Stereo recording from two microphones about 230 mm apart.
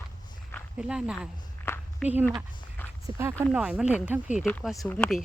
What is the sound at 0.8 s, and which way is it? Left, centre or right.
Speech, centre.